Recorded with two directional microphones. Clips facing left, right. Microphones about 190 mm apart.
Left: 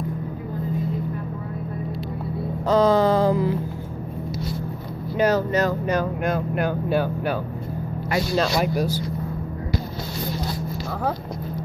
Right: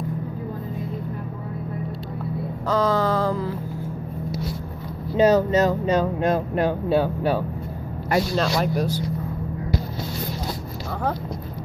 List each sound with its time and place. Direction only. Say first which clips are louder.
2.7 s a sound: left 4 dB; 20° left (ahead or behind)
5.1 s speech: right 3 dB; 20° right (ahead or behind)
8.4 s speech: left 1 dB; 5° left (ahead or behind)